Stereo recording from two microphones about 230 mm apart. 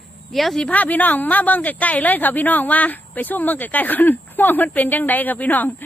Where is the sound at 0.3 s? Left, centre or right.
Centre.